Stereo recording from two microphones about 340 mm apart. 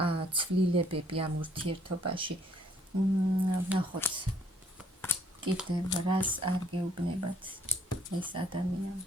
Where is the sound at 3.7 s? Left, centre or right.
Centre.